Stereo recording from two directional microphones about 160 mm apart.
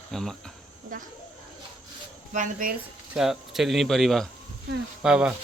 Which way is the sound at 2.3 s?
55° right (ahead or behind).